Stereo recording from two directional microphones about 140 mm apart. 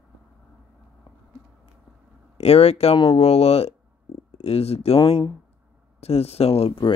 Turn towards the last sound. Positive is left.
turn(degrees=40)  # may be behind; listen again after turning